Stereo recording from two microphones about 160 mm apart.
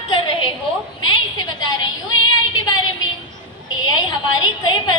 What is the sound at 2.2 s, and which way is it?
Female singing, 25° left (ahead or behind).